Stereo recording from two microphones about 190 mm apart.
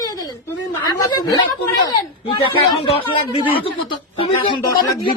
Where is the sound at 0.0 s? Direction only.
20° left (ahead or behind).